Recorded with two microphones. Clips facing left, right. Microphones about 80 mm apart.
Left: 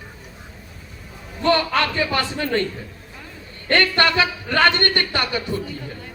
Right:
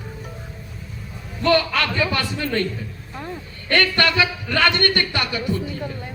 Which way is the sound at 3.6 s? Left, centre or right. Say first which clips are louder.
Left 1 dB; left.